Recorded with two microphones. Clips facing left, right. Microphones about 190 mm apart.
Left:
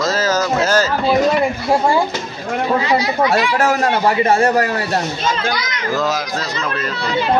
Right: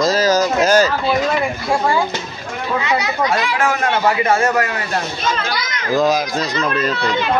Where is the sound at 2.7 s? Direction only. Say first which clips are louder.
Left 2 dB; 35° left (ahead or behind).